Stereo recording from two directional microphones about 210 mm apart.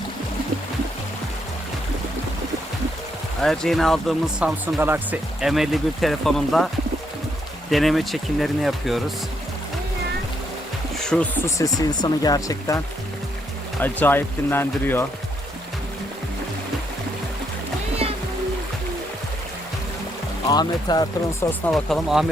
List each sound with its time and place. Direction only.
3.4 s speech: centre (ahead or behind)
7.7 s speech: centre (ahead or behind)
10.9 s speech: 5° left (ahead or behind)
18.0 s music: 30° right (ahead or behind)
20.5 s speech: 20° left (ahead or behind)
21.7 s speech: centre (ahead or behind)